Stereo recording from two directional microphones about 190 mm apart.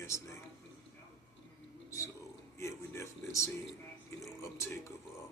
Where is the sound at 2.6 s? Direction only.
15° left (ahead or behind).